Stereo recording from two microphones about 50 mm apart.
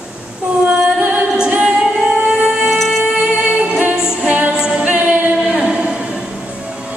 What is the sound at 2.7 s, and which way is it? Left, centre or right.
Music, centre.